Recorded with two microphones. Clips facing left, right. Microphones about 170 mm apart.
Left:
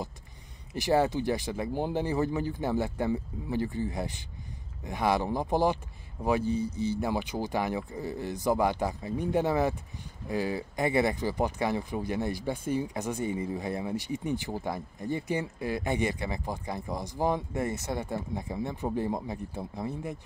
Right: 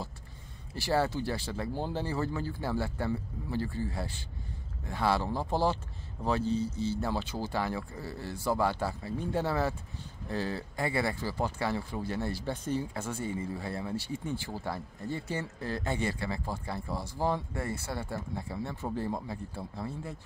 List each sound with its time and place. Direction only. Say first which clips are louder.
0.7 s speech: left 4 dB; 15° left (ahead or behind)